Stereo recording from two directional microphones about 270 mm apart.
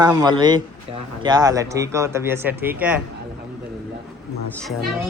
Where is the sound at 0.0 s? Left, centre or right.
Centre.